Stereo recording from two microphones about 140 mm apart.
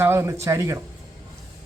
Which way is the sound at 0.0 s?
20° right (ahead or behind).